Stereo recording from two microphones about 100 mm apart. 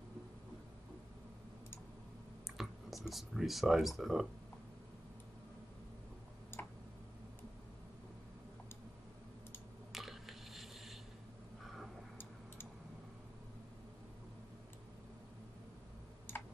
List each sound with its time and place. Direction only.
2.5 s speech: centre (ahead or behind)
6.5 s tick-tock: 20° left (ahead or behind)
9.9 s squish: centre (ahead or behind)
11.6 s tick-tock: centre (ahead or behind)